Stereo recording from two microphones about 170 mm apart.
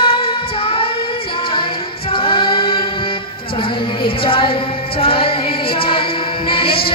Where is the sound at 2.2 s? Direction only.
30° left (ahead or behind).